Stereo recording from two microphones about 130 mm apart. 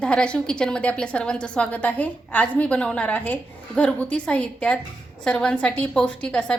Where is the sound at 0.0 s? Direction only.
10° left (ahead or behind).